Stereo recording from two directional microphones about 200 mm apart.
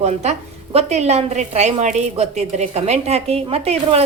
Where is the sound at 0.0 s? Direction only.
35° right (ahead or behind).